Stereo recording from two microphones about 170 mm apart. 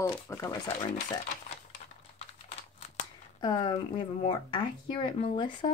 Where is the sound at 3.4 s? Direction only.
25° left (ahead or behind).